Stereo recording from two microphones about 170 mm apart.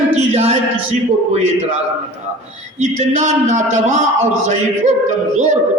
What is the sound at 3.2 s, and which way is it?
Music, 45° right (ahead or behind).